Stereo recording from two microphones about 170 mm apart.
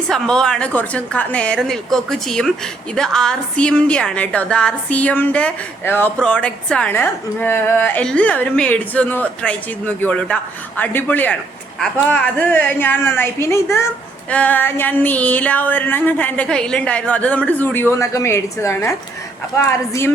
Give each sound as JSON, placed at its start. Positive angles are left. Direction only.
{"t": 0.1, "sound": "a woman's voice", "side_deg": 5}